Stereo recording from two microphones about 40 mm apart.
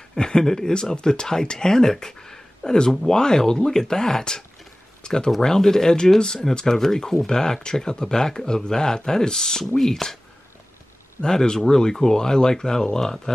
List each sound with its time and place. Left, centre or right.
0.1 s speech: centre
11.1 s speech: centre